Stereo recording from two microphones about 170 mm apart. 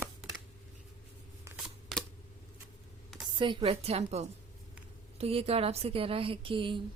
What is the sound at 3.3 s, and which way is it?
Speech, 30° right (ahead or behind).